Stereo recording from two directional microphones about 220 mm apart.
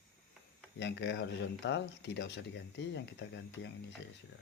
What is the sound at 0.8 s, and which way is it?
Speech, 55° left (ahead or behind).